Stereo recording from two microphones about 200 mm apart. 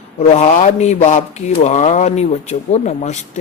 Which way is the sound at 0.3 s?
35° left (ahead or behind).